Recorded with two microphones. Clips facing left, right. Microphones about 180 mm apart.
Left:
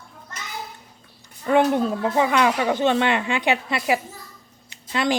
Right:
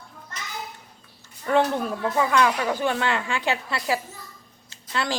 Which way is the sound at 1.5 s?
15° left (ahead or behind).